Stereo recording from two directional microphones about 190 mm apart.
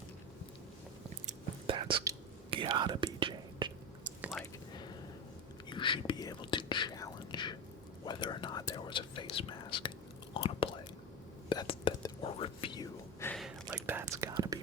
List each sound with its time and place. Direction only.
1.3 s whispering: 30° right (ahead or behind)
4.2 s whispering: centre (ahead or behind)
5.6 s whispering: 25° left (ahead or behind)
13.7 s whispering: 15° right (ahead or behind)